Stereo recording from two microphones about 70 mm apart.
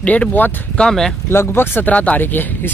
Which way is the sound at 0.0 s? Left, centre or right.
Centre.